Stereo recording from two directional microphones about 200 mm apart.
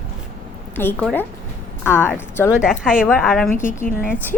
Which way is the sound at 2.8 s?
5° right (ahead or behind).